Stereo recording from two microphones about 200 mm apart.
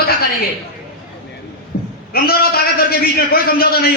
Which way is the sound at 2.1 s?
50° left (ahead or behind).